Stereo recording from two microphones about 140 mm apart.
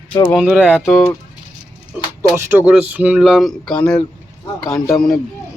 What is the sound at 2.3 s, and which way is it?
Speech, 15° right (ahead or behind).